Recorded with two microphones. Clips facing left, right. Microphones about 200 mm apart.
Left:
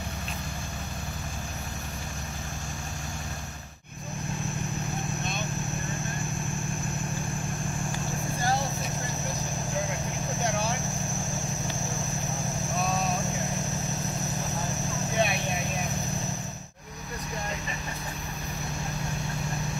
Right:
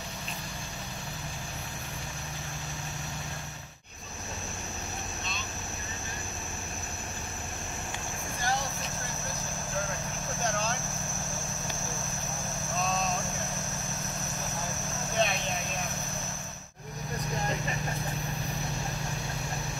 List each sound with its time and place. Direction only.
5.2 s vehicle: 55° left (ahead or behind)
10.4 s vehicle: 15° left (ahead or behind)
12.7 s vehicle: 15° left (ahead or behind)